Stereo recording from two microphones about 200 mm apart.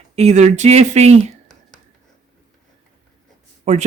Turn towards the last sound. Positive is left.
turn(degrees=-35)  # may be behind; listen again after turning